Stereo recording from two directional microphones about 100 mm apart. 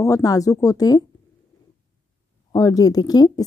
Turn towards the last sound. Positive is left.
turn(degrees=40)  # may be behind; listen again after turning